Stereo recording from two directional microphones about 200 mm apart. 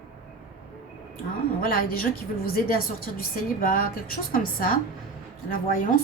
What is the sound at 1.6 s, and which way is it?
Speech, 45° left (ahead or behind).